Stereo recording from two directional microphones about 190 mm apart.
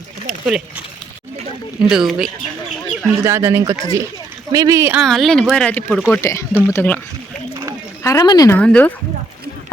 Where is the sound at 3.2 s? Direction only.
15° right (ahead or behind).